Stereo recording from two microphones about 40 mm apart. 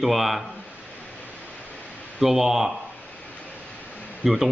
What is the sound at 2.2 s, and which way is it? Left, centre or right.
Speech, centre.